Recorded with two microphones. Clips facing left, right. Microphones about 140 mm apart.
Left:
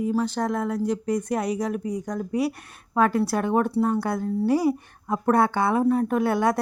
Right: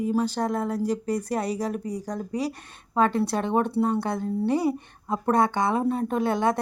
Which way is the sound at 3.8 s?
20° right (ahead or behind).